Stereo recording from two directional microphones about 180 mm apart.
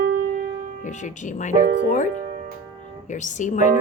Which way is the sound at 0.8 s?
45° left (ahead or behind).